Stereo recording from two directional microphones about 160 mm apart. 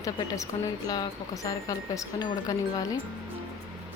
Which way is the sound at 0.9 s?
20° left (ahead or behind).